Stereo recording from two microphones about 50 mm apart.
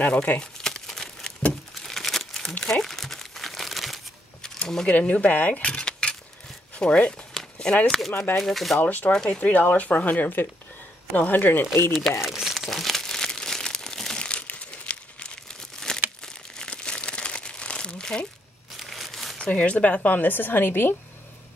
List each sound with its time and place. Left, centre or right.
0.0 s speech: left
0.7 s crumpling: centre
4.4 s a sound: centre
4.8 s speech: left
6.7 s a sound: left
8.4 s speech: centre
8.8 s speech: left
9.1 s speech: centre
9.4 s speech: left
11.9 s speech: centre
12.5 s crumpling: centre; by 15.3 s left
15.6 s crumpling: centre
18.8 s crumpling: centre
19.3 s speech: left